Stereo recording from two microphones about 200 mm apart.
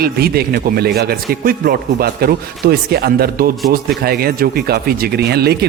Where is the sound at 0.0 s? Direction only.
50° right (ahead or behind).